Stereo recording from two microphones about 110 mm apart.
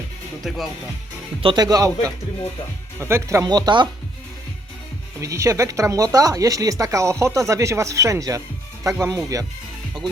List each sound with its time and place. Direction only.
0.4 s speech: centre (ahead or behind)
1.5 s speech: 35° right (ahead or behind)
5.2 s speech: 30° right (ahead or behind)